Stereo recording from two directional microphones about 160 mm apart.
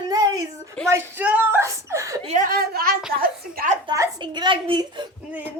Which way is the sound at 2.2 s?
50° right (ahead or behind).